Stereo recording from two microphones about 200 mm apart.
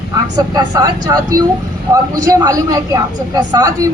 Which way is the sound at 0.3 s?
15° right (ahead or behind).